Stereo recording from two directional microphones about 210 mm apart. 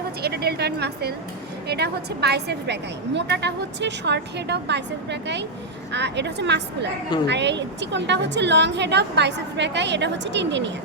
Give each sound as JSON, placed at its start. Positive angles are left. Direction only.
{"t": 0.2, "sound": "a woman's voice", "side_deg": -50}